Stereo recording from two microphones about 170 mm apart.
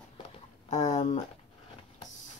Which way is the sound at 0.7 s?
45° left (ahead or behind).